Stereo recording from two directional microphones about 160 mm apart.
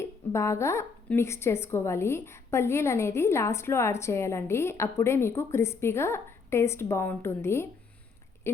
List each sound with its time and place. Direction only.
0.0 s speech: 15° left (ahead or behind)